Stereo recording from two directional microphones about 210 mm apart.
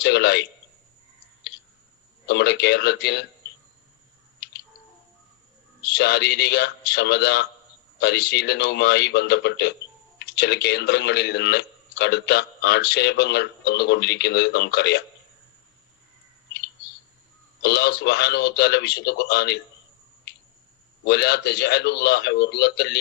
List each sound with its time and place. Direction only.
0.0 s a man's voice: 55° left (ahead or behind)
2.2 s a man's voice: 55° left (ahead or behind)
5.8 s a man's voice: 50° left (ahead or behind)
17.6 s a man's voice: 55° left (ahead or behind)
21.0 s a man's voice: 55° left (ahead or behind)